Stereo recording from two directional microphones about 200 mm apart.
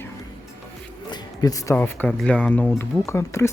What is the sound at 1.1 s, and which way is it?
Speech, 20° left (ahead or behind).